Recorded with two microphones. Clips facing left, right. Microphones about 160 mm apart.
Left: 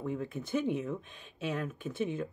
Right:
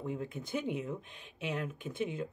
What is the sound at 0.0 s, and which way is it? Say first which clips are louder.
Speech: left 2 dB; 15° right (ahead or behind).